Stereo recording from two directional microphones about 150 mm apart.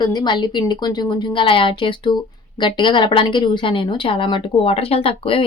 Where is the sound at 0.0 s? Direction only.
30° left (ahead or behind).